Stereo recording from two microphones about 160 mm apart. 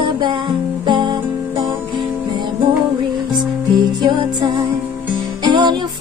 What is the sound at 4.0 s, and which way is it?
Music, 30° right (ahead or behind).